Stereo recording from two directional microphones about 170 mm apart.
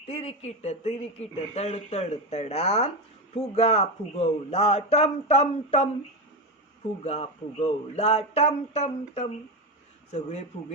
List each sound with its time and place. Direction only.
0.1 s speech: 35° left (ahead or behind)
7.0 s speech: 40° left (ahead or behind)